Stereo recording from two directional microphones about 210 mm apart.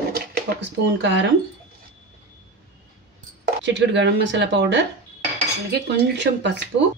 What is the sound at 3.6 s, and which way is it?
A woman's voice, 55° right (ahead or behind).